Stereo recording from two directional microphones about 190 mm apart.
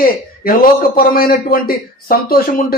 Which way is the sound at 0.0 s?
50° left (ahead or behind).